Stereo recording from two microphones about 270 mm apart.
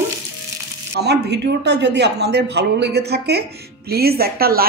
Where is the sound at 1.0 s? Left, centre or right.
Right.